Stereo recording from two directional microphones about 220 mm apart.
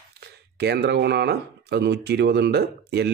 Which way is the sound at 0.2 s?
50° right (ahead or behind).